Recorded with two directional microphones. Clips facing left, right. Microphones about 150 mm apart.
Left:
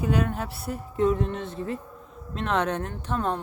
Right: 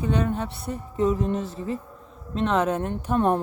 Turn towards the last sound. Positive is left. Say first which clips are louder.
# right 4 dB
turn(degrees=-10)  # may be behind; listen again after turning